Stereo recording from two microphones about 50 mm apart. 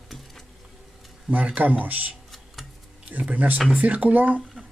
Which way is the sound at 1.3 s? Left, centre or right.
Right.